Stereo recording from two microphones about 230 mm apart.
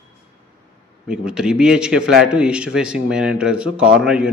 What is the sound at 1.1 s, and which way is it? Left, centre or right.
A man's voice, centre.